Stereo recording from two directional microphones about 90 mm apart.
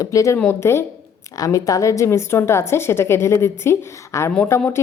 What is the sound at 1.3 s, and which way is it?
A woman's voice, 40° left (ahead or behind).